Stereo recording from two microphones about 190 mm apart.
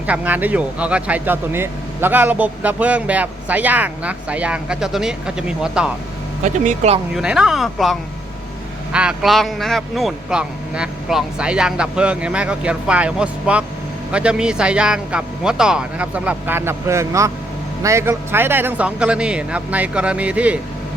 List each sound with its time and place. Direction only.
0.1 s speech: 10° right (ahead or behind)
6.4 s speech: 35° right (ahead or behind)
7.2 s speech: 5° right (ahead or behind)